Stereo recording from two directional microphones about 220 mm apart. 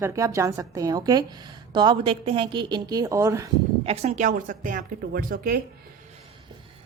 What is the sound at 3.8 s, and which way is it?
A woman's voice, 30° right (ahead or behind).